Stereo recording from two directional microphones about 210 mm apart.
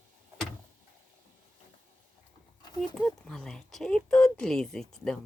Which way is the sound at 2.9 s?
5° left (ahead or behind).